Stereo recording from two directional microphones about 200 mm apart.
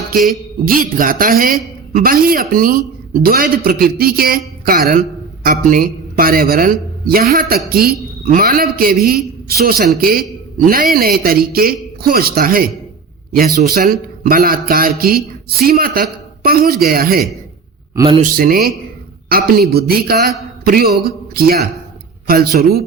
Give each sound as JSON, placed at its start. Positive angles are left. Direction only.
{"t": 0.6, "sound": "a man's voice", "side_deg": -45}
{"t": 17.9, "sound": "a man's voice", "side_deg": -25}
{"t": 18.2, "sound": "a man's voice", "side_deg": -45}